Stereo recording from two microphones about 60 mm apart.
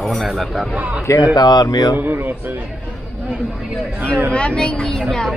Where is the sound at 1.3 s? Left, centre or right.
Left.